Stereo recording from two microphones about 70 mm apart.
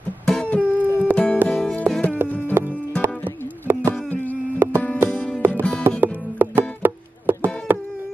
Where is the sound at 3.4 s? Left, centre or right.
Right.